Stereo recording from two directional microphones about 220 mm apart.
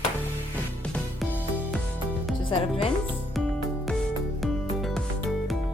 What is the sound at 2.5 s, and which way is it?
Speech, 25° left (ahead or behind).